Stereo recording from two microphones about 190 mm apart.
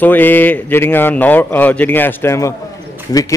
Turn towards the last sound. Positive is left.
turn(degrees=20)  # may be behind; listen again after turning